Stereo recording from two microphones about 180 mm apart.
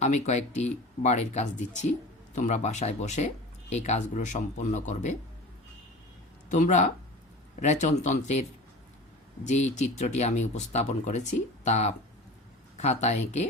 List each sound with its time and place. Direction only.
0.0 s speech: 40° left (ahead or behind)
6.5 s speech: 45° left (ahead or behind)